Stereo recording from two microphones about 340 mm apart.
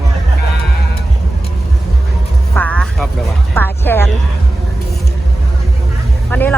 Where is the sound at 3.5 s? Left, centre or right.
Centre.